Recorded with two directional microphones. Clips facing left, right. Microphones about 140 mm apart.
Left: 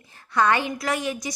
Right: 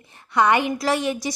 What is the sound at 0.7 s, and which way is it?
Speech, 30° right (ahead or behind).